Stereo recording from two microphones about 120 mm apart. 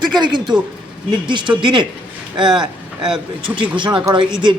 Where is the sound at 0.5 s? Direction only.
35° right (ahead or behind).